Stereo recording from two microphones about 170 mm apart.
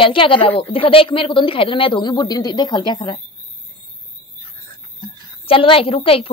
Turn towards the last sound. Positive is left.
turn(degrees=35)  # may be behind; listen again after turning